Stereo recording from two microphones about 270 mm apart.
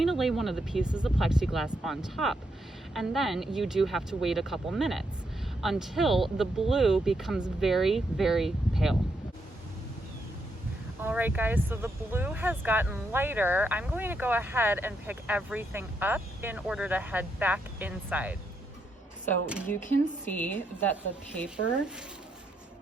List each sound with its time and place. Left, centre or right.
0.0 s speech: centre
11.0 s speech: centre
20.2 s a woman's voice: centre